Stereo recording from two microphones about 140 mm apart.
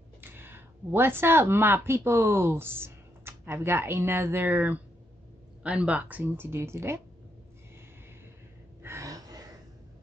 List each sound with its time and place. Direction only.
0.2 s speech: 15° right (ahead or behind)
8.8 s gasp: 20° right (ahead or behind)